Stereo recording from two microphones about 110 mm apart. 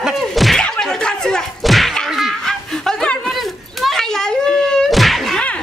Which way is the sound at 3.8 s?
5° left (ahead or behind).